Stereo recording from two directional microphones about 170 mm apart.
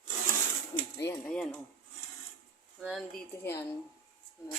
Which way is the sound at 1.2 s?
5° left (ahead or behind).